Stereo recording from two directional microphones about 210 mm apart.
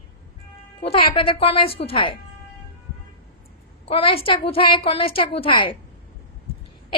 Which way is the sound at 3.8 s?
25° left (ahead or behind).